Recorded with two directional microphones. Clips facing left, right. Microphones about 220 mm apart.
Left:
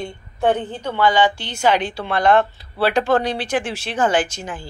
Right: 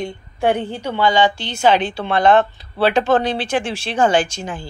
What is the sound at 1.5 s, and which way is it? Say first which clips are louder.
Speech: right 3 dB; 25° right (ahead or behind).